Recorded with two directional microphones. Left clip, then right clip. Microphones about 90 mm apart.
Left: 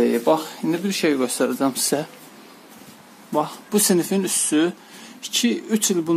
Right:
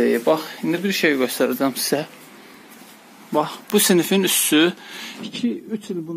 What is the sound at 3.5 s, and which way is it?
Speech, 20° right (ahead or behind).